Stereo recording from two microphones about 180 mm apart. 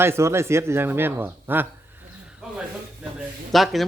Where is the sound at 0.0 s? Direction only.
15° right (ahead or behind).